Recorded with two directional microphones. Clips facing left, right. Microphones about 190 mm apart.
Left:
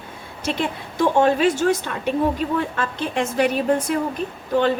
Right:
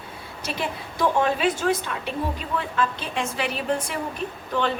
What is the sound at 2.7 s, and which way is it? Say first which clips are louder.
Speech: left 2 dB; 45° left (ahead or behind).